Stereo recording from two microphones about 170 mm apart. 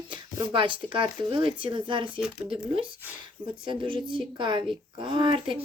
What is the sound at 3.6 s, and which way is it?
A woman's voice, 30° right (ahead or behind).